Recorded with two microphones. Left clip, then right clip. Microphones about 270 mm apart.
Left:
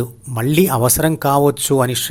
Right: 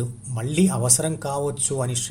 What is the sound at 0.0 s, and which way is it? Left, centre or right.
Speech, left.